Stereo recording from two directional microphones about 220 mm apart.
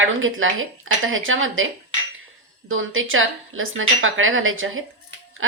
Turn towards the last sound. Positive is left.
turn(degrees=-65)  # may be behind; listen again after turning